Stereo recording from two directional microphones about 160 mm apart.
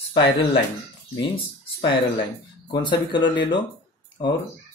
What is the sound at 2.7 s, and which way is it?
Speech, 30° left (ahead or behind).